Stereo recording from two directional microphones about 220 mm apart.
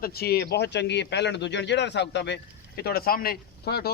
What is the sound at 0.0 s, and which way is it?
Speech, 45° left (ahead or behind).